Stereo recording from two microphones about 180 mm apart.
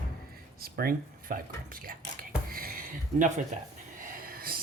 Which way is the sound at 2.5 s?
55° right (ahead or behind).